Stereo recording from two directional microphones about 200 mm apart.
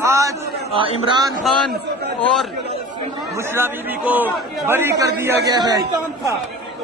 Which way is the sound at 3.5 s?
10° right (ahead or behind).